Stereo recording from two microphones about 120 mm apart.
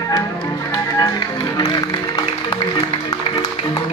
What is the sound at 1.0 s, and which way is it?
Music, 35° left (ahead or behind).